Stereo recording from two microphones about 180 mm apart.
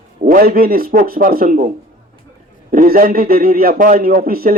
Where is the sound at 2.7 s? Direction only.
55° right (ahead or behind).